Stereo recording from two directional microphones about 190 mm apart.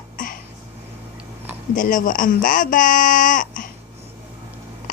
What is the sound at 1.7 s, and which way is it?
Music, 45° left (ahead or behind).